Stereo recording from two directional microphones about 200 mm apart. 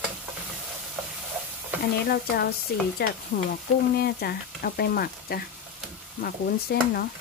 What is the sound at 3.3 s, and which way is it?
Stir, 40° left (ahead or behind).